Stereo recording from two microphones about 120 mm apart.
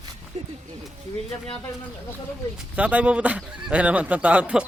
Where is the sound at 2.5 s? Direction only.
10° right (ahead or behind).